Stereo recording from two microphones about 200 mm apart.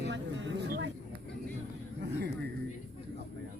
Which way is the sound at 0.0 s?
60° right (ahead or behind).